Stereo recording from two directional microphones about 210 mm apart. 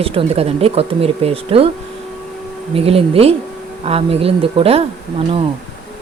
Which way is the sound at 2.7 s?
25° right (ahead or behind).